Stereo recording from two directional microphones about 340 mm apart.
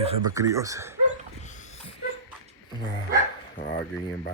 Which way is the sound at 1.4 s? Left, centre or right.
Left.